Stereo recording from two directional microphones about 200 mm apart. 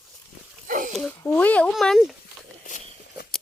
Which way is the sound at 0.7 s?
40° right (ahead or behind).